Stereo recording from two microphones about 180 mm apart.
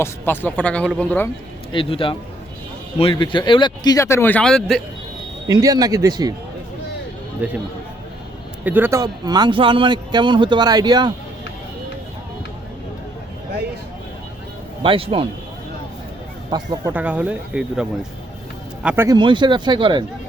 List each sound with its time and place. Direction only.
0.0 s speech: 10° left (ahead or behind)
1.7 s speech: 30° left (ahead or behind); by 4.8 s 5° left (ahead or behind)
5.5 s speech: 20° right (ahead or behind)
8.6 s speech: 10° right (ahead or behind)
14.8 s speech: 30° right (ahead or behind)
16.5 s speech: 20° right (ahead or behind)
16.9 s speech: 5° right (ahead or behind)
19.0 s speech: 25° right (ahead or behind)